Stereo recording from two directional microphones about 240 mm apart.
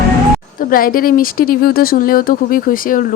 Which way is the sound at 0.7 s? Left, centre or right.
Left.